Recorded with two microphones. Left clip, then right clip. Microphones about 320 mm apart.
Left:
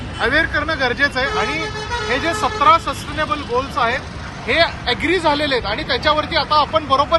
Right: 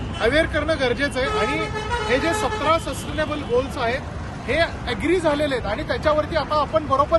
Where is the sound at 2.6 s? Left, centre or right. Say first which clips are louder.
Left 8 dB; centre.